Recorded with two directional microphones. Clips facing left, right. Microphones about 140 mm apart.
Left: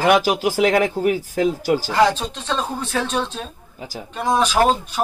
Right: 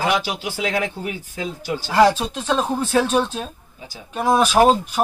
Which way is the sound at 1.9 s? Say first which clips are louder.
Right 6 dB; 5° right (ahead or behind).